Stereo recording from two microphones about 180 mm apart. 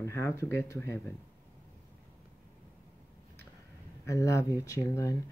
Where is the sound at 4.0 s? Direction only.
15° left (ahead or behind).